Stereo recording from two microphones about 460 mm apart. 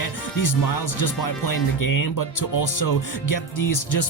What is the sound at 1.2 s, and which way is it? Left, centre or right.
Speech, left.